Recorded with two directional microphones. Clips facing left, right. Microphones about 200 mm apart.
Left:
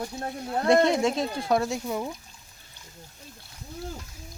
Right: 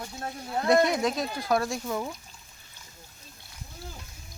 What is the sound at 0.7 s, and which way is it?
Speech, 25° left (ahead or behind).